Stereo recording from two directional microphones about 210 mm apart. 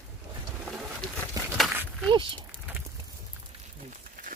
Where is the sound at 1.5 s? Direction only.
5° right (ahead or behind).